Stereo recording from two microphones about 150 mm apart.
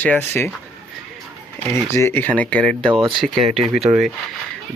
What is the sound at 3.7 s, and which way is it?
Speech, 45° right (ahead or behind).